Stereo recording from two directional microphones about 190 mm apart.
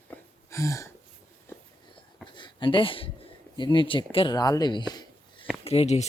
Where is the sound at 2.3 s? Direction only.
25° left (ahead or behind).